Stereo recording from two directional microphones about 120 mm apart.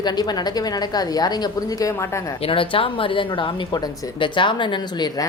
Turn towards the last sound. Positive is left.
turn(degrees=35)  # may be behind; listen again after turning